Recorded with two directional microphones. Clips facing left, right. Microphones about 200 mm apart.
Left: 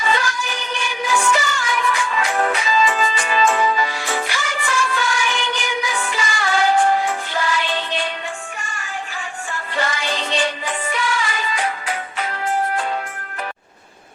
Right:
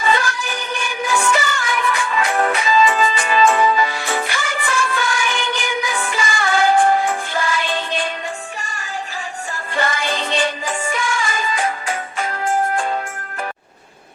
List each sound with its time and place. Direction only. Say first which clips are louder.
0.1 s music: right 2 dB; 50° right (ahead or behind)
9.7 s music: right 2 dB; 50° right (ahead or behind)